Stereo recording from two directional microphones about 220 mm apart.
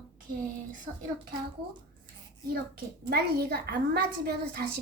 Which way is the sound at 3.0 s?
45° right (ahead or behind).